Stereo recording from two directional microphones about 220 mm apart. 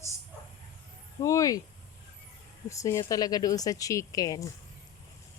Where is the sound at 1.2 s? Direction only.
15° left (ahead or behind).